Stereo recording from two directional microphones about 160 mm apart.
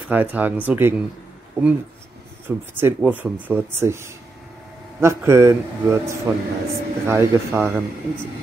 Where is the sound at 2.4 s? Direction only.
10° right (ahead or behind).